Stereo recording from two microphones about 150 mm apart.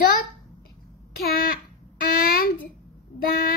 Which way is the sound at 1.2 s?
85° left.